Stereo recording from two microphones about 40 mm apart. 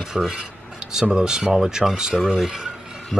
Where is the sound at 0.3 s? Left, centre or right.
Right.